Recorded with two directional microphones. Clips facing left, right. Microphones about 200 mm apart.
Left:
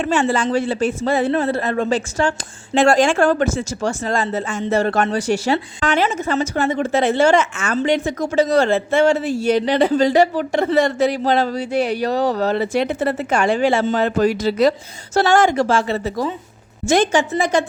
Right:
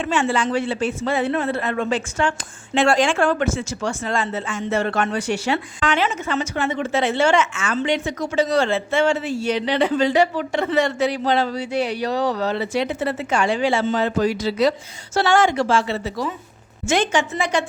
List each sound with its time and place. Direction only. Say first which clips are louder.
0.0 s a woman's voice: left 3 dB; 40° left (ahead or behind)
15.2 s a woman's voice: left 3 dB; 40° left (ahead or behind)